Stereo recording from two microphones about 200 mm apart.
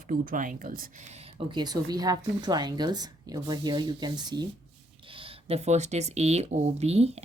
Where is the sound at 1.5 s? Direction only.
20° right (ahead or behind).